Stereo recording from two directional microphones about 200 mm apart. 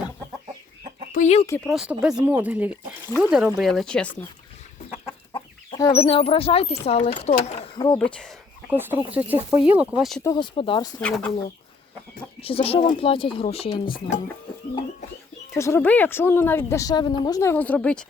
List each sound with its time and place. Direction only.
1.1 s speech: 35° left (ahead or behind)
1.6 s speech: centre (ahead or behind)
5.3 s speech: 20° left (ahead or behind)
7.9 s speech: 5° left (ahead or behind)
8.7 s speech: 10° right (ahead or behind)
10.2 s speech: 20° left (ahead or behind)
12.4 s speech: 30° left (ahead or behind)
13.8 s speech: 45° left (ahead or behind)
15.5 s speech: 15° left (ahead or behind)